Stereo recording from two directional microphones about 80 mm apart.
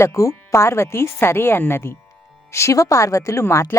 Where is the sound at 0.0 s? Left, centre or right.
Left.